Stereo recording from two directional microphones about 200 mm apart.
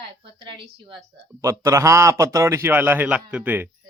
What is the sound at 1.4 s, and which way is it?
Speech, 15° right (ahead or behind).